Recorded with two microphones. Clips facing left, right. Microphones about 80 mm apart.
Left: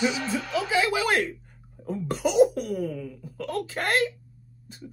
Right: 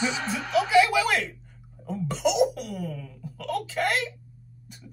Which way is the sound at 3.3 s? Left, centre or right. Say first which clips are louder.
Right 1 dB; left.